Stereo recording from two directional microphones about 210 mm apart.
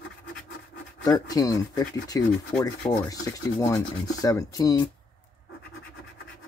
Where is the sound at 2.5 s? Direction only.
5° left (ahead or behind).